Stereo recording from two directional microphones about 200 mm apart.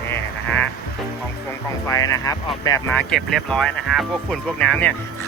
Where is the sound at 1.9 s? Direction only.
15° left (ahead or behind).